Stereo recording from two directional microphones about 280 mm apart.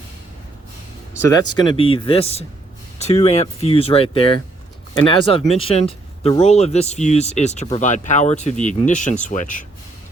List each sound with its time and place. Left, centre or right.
1.2 s speech: centre